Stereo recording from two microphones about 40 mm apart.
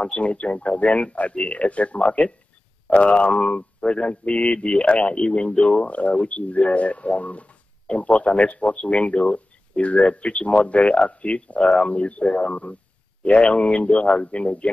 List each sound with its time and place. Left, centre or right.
0.0 s speech: left